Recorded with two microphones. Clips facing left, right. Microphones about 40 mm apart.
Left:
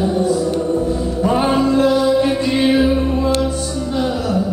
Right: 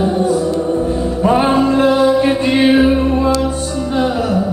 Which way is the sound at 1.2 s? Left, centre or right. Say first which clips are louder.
Right 3 dB; right.